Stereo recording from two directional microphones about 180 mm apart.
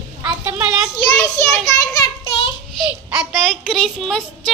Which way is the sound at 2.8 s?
5° right (ahead or behind).